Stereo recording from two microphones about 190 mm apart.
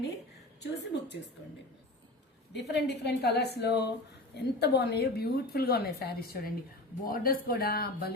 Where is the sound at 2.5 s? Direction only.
60° left (ahead or behind).